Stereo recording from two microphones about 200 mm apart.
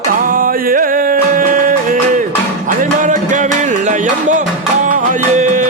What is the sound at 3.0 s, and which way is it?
Music, 40° right (ahead or behind).